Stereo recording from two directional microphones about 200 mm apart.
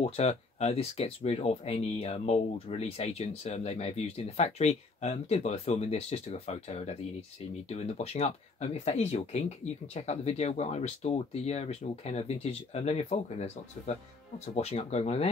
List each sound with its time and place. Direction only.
0.0 s speech: 30° left (ahead or behind)